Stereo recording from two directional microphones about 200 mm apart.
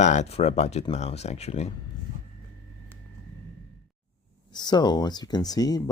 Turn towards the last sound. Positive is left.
turn(degrees=20)  # may be behind; listen again after turning